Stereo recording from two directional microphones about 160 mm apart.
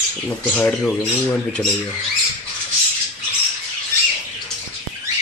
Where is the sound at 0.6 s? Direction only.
10° left (ahead or behind).